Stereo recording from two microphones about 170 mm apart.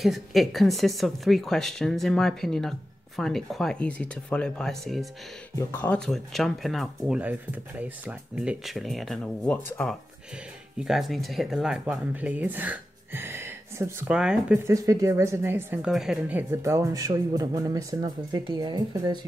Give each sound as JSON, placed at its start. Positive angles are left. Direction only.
{"t": 0.0, "sound": "speech", "side_deg": 0}
{"t": 5.6, "sound": "speech", "side_deg": 10}
{"t": 14.7, "sound": "speech", "side_deg": -20}